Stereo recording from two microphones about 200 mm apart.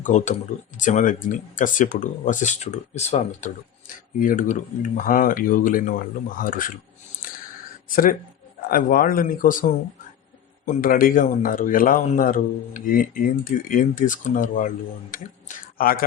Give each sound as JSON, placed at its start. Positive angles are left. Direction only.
{"t": 0.0, "sound": "speech", "side_deg": 35}
{"t": 7.9, "sound": "speech", "side_deg": 45}